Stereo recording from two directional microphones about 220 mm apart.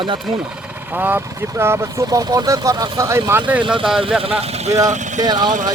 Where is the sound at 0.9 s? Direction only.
10° right (ahead or behind).